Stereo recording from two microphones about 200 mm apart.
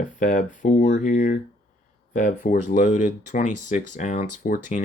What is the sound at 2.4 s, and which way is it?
Speech, 40° left (ahead or behind).